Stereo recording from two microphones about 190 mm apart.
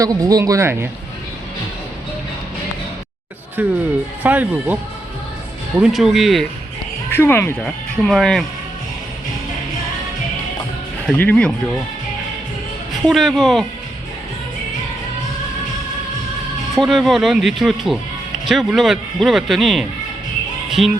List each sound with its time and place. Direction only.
0.0 s speech: 20° right (ahead or behind)
3.6 s a man's voice: 10° right (ahead or behind)
7.1 s a man's voice: 10° left (ahead or behind)
11.0 s a man's voice: 5° left (ahead or behind)
13.1 s a man's voice: centre (ahead or behind)
16.7 s a man's voice: centre (ahead or behind)
20.7 s music: centre (ahead or behind)